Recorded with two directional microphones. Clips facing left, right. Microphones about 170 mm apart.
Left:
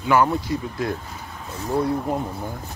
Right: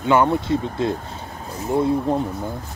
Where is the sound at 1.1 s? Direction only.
30° right (ahead or behind).